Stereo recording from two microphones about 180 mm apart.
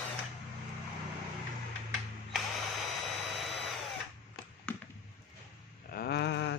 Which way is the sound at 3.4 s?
Centre (ahead or behind).